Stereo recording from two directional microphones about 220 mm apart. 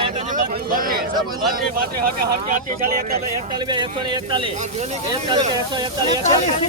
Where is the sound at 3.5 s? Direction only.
20° right (ahead or behind).